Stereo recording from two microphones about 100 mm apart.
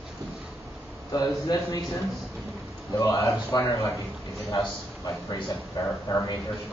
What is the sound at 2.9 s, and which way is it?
Speech, 35° left (ahead or behind).